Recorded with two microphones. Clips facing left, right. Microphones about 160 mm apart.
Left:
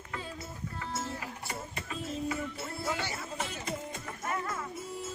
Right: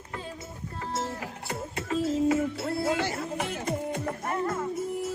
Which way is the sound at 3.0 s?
50° right (ahead or behind).